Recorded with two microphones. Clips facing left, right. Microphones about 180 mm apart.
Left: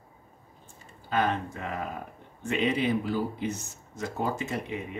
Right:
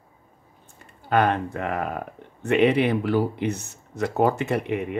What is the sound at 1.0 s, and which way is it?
Speech, 60° right (ahead or behind).